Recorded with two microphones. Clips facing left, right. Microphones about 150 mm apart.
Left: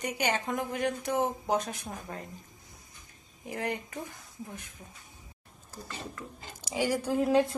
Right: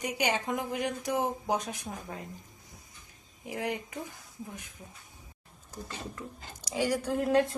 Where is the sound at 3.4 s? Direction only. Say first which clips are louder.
Even; 10° right (ahead or behind).